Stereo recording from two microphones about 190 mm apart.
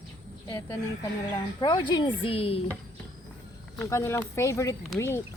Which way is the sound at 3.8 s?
15° left (ahead or behind).